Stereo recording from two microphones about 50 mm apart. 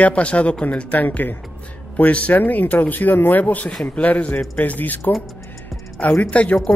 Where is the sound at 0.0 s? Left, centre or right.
Left.